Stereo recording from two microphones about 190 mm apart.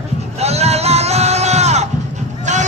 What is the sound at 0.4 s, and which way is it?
Music, 35° right (ahead or behind).